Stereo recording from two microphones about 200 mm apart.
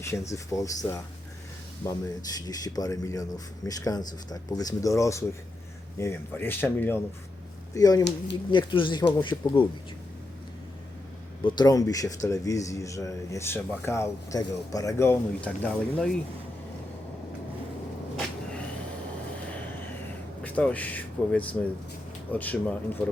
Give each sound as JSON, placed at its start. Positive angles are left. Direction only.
{"t": 0.0, "sound": "speech", "side_deg": 15}
{"t": 11.4, "sound": "speech", "side_deg": 20}
{"t": 20.4, "sound": "speech", "side_deg": 5}